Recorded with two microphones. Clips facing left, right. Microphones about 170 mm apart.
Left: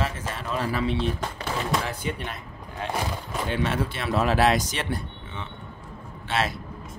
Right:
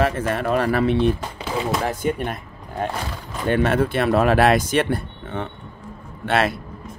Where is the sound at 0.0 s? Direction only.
60° right (ahead or behind).